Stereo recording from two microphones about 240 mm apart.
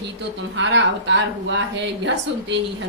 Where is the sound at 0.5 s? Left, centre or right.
Right.